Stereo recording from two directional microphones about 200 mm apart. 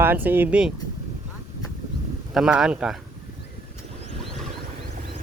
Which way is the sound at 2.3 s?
5° right (ahead or behind).